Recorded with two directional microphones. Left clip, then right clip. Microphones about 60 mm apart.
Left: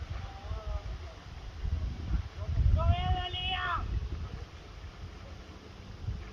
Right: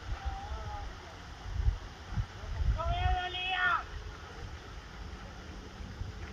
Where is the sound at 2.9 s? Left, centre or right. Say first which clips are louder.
Right 2 dB; centre.